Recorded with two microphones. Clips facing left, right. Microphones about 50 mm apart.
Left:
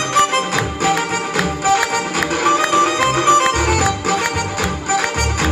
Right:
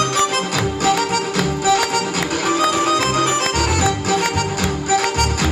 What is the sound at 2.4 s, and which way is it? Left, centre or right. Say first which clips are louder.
Music: left 3 dB; left.